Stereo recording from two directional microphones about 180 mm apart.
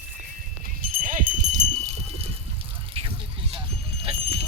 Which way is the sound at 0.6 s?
45° right (ahead or behind).